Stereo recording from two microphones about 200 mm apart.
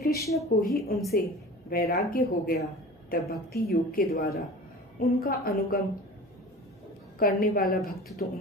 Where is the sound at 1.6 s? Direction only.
45° left (ahead or behind).